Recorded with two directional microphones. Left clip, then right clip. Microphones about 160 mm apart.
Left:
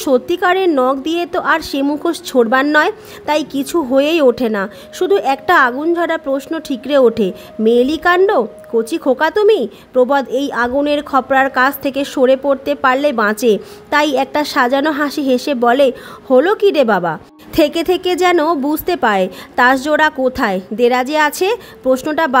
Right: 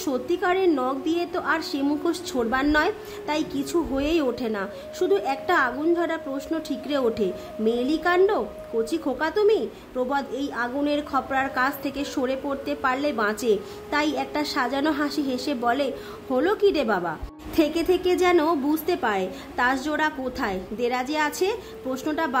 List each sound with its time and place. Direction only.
0.0 s a woman's voice: 50° left (ahead or behind)